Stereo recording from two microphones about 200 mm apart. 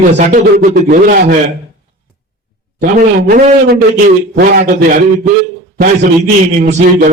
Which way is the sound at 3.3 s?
45° right (ahead or behind).